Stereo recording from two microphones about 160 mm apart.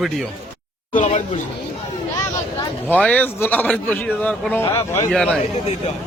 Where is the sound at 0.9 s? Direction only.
45° left (ahead or behind).